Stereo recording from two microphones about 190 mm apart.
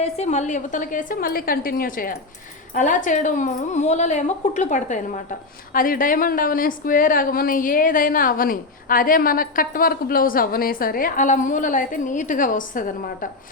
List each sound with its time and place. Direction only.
0.0 s a woman's voice: 35° left (ahead or behind)